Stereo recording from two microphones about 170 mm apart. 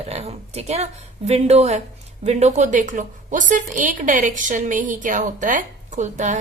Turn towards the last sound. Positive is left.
turn(degrees=-45)  # may be behind; listen again after turning